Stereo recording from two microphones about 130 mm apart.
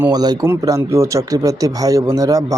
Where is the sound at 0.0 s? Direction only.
30° right (ahead or behind).